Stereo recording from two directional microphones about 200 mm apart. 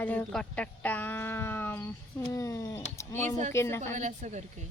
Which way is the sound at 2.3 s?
15° left (ahead or behind).